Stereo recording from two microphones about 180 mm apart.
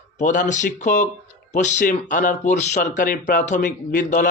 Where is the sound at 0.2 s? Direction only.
45° left (ahead or behind).